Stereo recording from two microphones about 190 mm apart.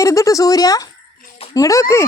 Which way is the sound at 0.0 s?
15° left (ahead or behind).